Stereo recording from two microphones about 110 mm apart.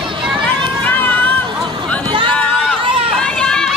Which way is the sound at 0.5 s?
15° left (ahead or behind).